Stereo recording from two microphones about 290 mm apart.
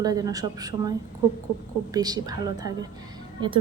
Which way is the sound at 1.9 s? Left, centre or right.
Centre.